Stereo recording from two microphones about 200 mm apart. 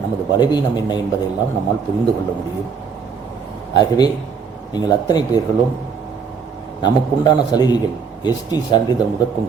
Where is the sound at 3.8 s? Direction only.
20° left (ahead or behind).